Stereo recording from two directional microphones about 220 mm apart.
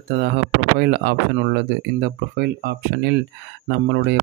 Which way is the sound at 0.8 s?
45° right (ahead or behind).